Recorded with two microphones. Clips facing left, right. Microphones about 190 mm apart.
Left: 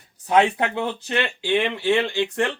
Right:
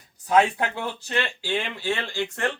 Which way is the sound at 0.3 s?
25° left (ahead or behind).